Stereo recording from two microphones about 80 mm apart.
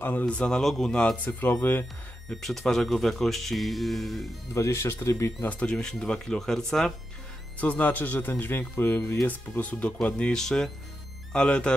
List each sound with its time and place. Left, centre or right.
0.0 s a man's voice: centre
2.2 s speech: centre
4.6 s speech: left
5.4 s a man's voice: centre
7.6 s a man's voice: centre